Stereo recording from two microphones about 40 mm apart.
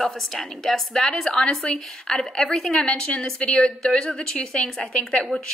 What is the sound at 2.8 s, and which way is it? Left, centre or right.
A woman's voice, left.